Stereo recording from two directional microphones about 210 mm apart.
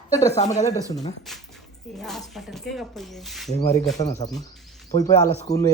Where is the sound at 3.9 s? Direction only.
15° left (ahead or behind).